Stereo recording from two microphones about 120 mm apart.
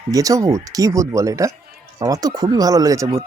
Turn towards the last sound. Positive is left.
turn(degrees=-30)  # may be behind; listen again after turning